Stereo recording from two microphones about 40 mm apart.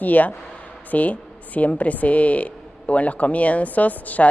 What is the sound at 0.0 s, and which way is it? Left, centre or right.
A woman's voice, left.